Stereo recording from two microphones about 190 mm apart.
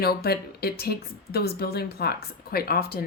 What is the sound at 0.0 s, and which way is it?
Speech, 55° left (ahead or behind).